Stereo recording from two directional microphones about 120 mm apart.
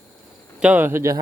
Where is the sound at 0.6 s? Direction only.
15° right (ahead or behind).